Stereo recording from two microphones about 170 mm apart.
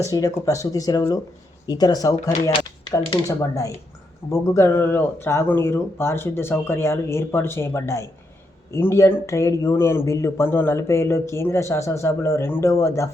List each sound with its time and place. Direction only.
0.0 s speech: 20° left (ahead or behind)